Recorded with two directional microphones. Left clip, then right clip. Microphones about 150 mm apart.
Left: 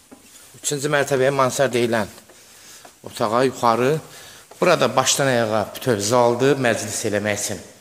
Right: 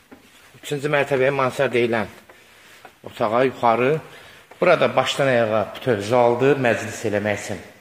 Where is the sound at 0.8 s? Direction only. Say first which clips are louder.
Even; 15° left (ahead or behind).